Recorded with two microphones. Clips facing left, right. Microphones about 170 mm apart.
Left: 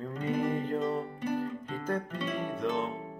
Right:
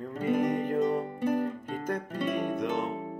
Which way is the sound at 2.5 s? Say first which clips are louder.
Right 2 dB; 15° right (ahead or behind).